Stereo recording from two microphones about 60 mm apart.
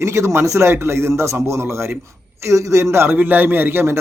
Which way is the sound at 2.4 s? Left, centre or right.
Right.